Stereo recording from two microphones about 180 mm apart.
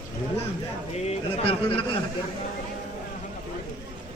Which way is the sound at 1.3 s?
30° left (ahead or behind).